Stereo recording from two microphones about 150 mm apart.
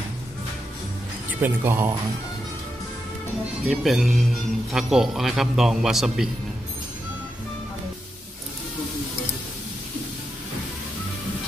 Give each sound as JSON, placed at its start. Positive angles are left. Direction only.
{"t": 1.4, "sound": "speech", "side_deg": -15}
{"t": 3.6, "sound": "a man's voice", "side_deg": 0}